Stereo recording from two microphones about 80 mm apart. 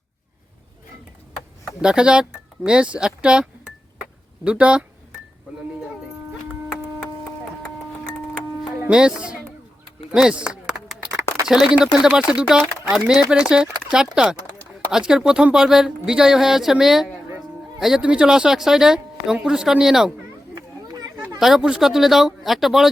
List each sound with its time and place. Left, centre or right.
1.8 s speech: centre
4.4 s speech: centre
8.9 s speech: centre
10.2 s a sound: centre
11.9 s speech: centre
20.6 s a sound: right
21.3 s speech: centre